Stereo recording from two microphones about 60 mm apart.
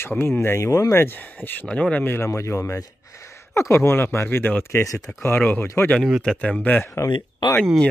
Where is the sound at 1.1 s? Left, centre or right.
Left.